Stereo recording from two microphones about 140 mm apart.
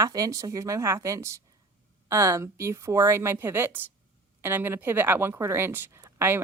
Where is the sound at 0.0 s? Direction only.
25° right (ahead or behind).